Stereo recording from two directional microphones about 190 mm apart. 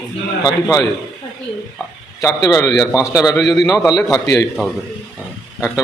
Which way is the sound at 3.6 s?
20° left (ahead or behind).